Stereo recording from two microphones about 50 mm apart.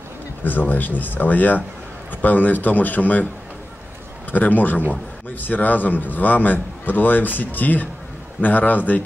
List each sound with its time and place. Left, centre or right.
0.4 s a man's voice: left
4.3 s a man's voice: left